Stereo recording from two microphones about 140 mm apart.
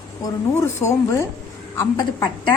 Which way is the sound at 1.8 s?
30° left (ahead or behind).